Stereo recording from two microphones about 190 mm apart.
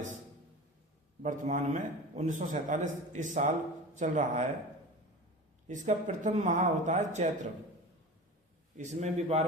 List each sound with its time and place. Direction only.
1.2 s a man's voice: 40° right (ahead or behind)
5.6 s a man's voice: 40° right (ahead or behind)
8.8 s a man's voice: 35° right (ahead or behind)